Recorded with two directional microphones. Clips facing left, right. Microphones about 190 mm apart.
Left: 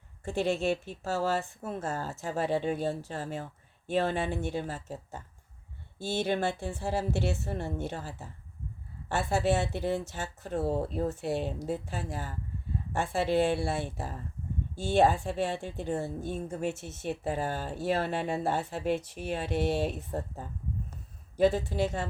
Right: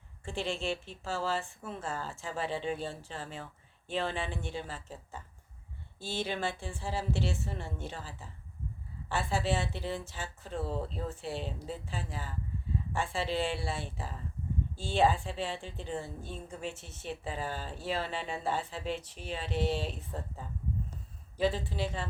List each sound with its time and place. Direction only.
0.3 s a woman's voice: 40° left (ahead or behind); by 8.1 s 60° left (ahead or behind)
9.0 s a woman's voice: 50° left (ahead or behind)